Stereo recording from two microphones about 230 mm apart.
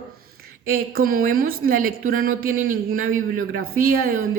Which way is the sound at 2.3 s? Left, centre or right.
Right.